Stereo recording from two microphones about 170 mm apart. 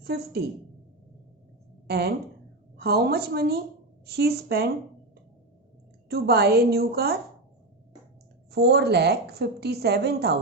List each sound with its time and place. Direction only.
0.0 s a woman's voice: 70° right (ahead or behind)
1.9 s a woman's voice: 70° right (ahead or behind)
6.1 s a woman's voice: 65° right (ahead or behind)
8.5 s a woman's voice: 70° right (ahead or behind)